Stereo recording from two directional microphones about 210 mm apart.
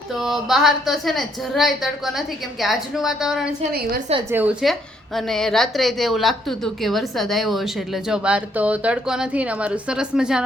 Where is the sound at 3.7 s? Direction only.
50° right (ahead or behind).